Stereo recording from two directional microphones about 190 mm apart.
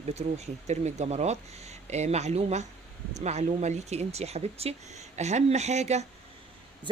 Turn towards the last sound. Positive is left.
turn(degrees=-35)  # may be behind; listen again after turning